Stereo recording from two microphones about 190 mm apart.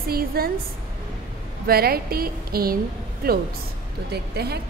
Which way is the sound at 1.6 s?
55° right (ahead or behind).